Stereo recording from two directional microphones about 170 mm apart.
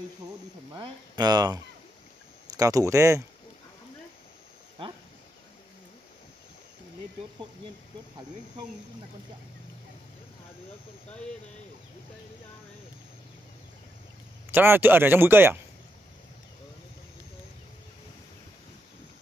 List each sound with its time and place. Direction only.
0.7 s speech: 25° right (ahead or behind)
14.5 s speech: 10° right (ahead or behind)